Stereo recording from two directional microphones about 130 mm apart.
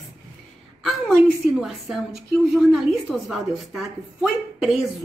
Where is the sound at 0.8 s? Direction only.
Centre (ahead or behind).